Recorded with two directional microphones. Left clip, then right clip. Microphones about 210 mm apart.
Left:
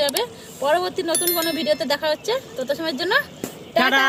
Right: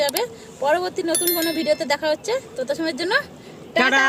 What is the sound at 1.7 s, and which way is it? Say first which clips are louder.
A woman's voice: right 1 dB; 20° right (ahead or behind).